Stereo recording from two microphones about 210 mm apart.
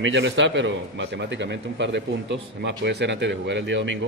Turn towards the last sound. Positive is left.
turn(degrees=-60)  # may be behind; listen again after turning